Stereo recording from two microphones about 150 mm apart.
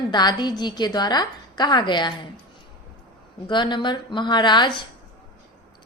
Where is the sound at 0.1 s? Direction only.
30° left (ahead or behind).